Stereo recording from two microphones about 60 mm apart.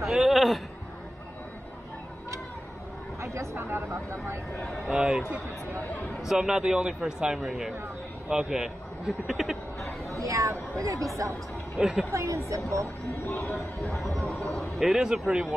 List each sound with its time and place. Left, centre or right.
0.0 s a sound: centre
3.2 s speech: right
4.9 s a man's voice: centre
6.2 s a man's voice: centre
10.0 s a woman's voice: right
11.8 s a man's voice: centre
12.1 s a woman's voice: right
13.8 s a man's voice: centre